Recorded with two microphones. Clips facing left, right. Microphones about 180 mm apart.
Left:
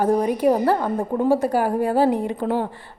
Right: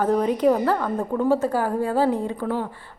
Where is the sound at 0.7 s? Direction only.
25° left (ahead or behind).